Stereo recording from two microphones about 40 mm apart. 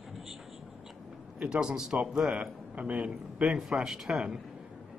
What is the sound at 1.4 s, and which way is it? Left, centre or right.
Speech, right.